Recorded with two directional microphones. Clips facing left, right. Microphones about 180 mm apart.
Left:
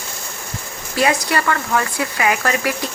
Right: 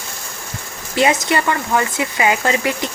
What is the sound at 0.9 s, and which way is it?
Speech, 20° right (ahead or behind).